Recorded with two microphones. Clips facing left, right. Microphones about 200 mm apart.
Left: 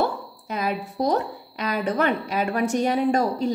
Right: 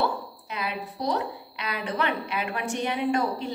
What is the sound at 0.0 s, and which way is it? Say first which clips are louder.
A woman's voice: left 3 dB; 45° left (ahead or behind).